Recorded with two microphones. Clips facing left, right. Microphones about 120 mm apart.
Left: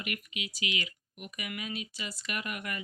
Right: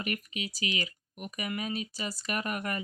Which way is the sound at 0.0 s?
40° right (ahead or behind).